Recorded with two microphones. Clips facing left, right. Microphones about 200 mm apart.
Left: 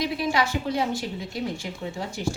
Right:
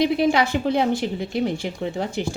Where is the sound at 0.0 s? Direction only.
60° right (ahead or behind).